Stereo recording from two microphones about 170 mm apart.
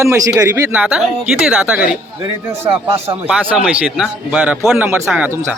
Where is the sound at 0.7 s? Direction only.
5° right (ahead or behind).